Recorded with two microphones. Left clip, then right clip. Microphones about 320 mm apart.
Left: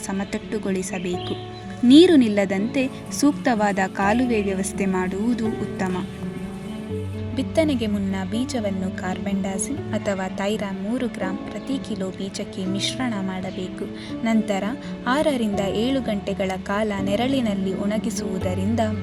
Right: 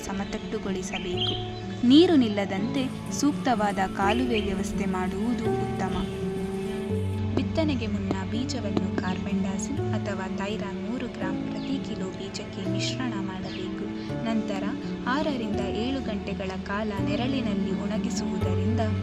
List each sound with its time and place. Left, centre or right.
0.5 s a woman's voice: centre
7.3 s speech: left
12.7 s speech: left
14.3 s speech: left